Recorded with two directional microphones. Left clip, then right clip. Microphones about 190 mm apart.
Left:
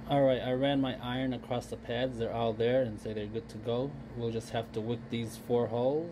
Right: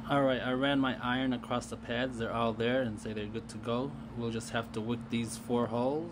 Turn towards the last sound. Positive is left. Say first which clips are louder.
# left 2 dB
turn(degrees=5)  # may be behind; listen again after turning